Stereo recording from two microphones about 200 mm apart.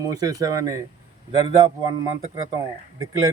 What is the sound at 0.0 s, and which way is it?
A man's voice, 20° right (ahead or behind).